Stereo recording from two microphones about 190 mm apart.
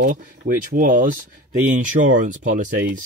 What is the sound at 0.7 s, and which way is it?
Speech, 45° right (ahead or behind).